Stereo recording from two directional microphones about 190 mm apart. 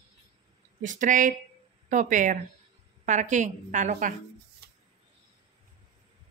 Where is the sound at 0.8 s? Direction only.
45° right (ahead or behind).